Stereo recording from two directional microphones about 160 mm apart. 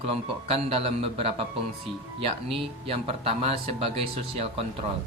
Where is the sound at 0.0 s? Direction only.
40° right (ahead or behind).